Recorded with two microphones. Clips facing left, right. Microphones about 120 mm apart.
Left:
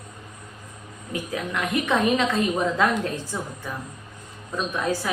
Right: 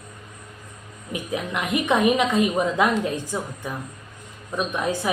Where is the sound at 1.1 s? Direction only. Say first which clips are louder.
Right 1 dB; 20° right (ahead or behind).